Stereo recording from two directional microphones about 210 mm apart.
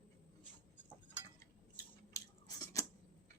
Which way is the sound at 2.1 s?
15° left (ahead or behind).